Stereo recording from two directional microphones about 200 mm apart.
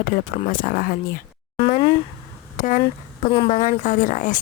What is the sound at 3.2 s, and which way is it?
Speech, 25° left (ahead or behind).